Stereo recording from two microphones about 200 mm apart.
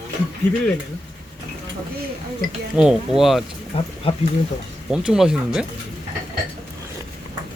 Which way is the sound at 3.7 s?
30° left (ahead or behind).